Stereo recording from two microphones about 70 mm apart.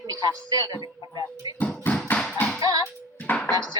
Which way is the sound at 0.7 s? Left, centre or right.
Left.